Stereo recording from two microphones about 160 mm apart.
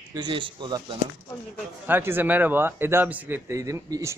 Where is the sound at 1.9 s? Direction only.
15° right (ahead or behind).